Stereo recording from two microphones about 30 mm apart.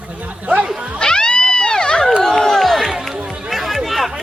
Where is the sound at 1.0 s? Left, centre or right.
Left.